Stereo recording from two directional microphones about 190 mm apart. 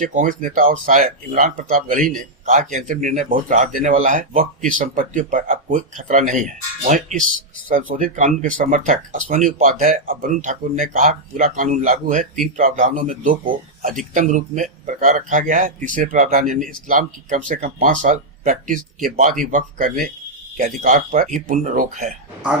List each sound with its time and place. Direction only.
0.0 s speech: 45° right (ahead or behind)